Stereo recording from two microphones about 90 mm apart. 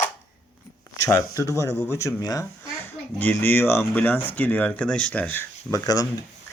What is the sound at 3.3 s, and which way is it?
Speech, 25° left (ahead or behind).